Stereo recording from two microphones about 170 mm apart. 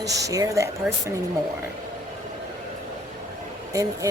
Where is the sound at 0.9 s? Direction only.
Centre (ahead or behind).